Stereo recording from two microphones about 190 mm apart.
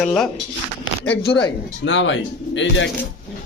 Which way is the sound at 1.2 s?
25° left (ahead or behind).